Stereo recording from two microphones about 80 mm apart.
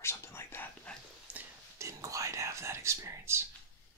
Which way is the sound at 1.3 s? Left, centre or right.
Centre.